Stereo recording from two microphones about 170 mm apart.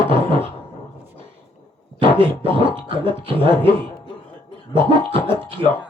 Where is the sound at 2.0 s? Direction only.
30° right (ahead or behind).